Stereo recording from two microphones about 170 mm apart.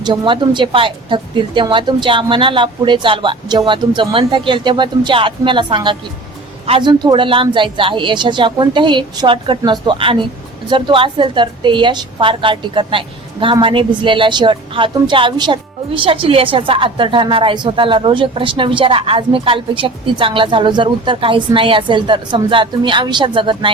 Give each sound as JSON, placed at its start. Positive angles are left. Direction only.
{"t": 0.0, "sound": "a woman's voice", "side_deg": -25}